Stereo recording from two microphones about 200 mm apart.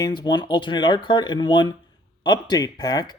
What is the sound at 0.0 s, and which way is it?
Speech, 20° left (ahead or behind).